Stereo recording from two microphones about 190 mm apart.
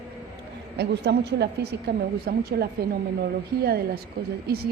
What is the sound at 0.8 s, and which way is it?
A woman's voice, 60° right (ahead or behind).